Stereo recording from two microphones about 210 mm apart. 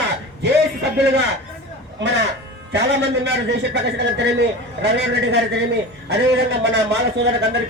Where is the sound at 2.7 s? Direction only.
55° right (ahead or behind).